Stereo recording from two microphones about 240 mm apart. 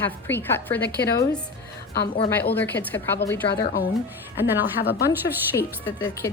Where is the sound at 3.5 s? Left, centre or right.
Left.